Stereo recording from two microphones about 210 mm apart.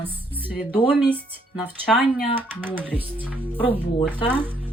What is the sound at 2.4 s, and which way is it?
Speech, 10° right (ahead or behind).